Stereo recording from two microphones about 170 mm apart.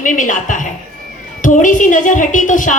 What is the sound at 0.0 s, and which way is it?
A woman's voice, 50° left (ahead or behind).